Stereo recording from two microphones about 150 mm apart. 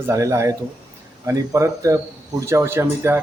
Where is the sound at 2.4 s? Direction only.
20° right (ahead or behind).